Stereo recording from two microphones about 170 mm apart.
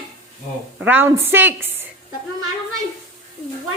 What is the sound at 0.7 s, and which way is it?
A woman's voice, 10° right (ahead or behind).